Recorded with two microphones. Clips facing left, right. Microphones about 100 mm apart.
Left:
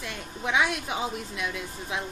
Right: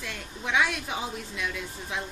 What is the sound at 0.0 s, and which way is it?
A woman's voice, 20° left (ahead or behind).